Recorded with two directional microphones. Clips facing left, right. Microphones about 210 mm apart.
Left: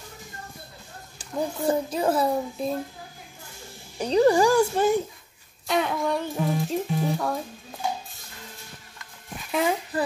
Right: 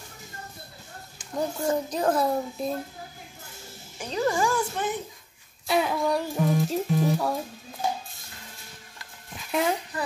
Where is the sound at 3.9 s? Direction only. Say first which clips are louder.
Left 8 dB; 35° left (ahead or behind).